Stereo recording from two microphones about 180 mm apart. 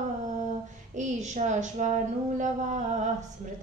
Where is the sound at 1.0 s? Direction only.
40° right (ahead or behind).